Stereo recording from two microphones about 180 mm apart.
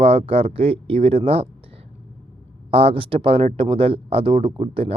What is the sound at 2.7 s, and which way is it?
A man's voice, 30° right (ahead or behind).